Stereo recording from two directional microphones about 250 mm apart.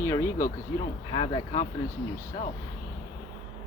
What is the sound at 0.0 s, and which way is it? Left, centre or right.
Speech, centre.